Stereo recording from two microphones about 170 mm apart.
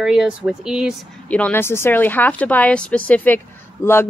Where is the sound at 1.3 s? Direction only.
10° left (ahead or behind).